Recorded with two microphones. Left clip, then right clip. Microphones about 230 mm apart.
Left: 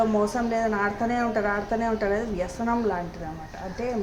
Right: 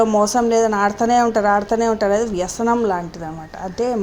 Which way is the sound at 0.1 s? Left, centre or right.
Right.